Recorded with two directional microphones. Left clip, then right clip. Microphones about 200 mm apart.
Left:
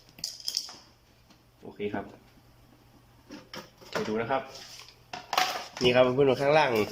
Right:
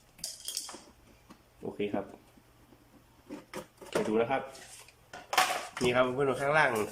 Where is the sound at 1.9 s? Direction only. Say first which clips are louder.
Even; 5° right (ahead or behind).